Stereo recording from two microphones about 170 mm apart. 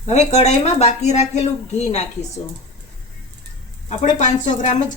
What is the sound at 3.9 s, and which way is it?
Speech, 45° left (ahead or behind).